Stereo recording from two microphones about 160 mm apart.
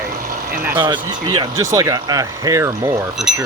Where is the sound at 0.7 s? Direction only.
25° right (ahead or behind).